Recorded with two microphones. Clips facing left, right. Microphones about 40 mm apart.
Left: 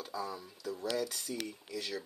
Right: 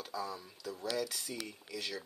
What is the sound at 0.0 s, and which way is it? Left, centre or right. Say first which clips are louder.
Speech: left 1 dB; centre.